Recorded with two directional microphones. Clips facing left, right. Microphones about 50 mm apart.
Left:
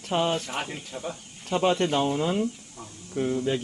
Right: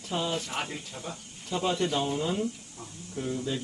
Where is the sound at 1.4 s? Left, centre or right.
Left.